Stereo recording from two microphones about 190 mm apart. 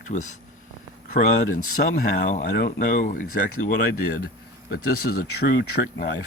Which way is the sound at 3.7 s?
55° left (ahead or behind).